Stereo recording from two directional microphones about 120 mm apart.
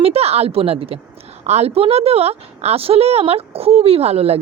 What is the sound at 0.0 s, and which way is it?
A woman's voice, 60° right (ahead or behind).